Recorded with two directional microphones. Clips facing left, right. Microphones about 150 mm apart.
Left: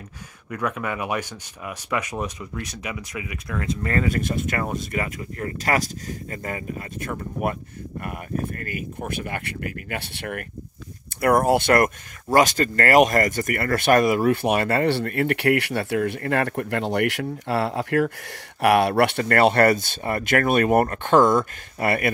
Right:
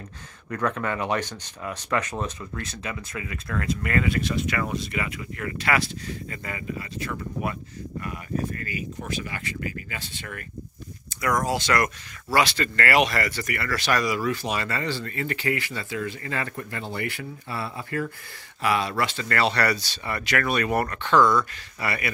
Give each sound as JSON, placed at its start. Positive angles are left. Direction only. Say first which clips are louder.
{"t": 0.5, "sound": "speech", "louder": "even", "side_deg": 10}
{"t": 3.8, "sound": "speech", "louder": "left 2 dB", "side_deg": 40}